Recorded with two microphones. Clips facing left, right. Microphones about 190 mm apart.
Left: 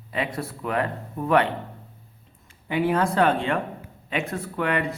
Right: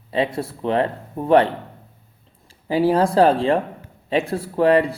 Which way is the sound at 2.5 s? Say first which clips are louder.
Right 5 dB; 35° right (ahead or behind).